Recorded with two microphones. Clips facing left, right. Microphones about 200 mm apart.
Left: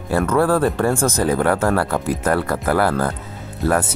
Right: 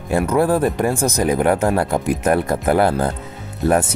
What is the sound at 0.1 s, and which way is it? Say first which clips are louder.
Speech: even; 15° right (ahead or behind).